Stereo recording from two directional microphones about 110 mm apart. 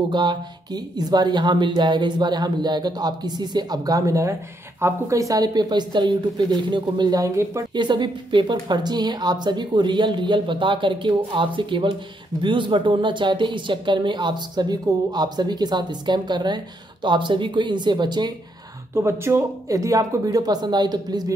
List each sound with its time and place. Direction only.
0.1 s speech: 45° right (ahead or behind)
7.7 s speech: 45° right (ahead or behind)
18.9 s speech: 25° right (ahead or behind); by 21.3 s 40° right (ahead or behind)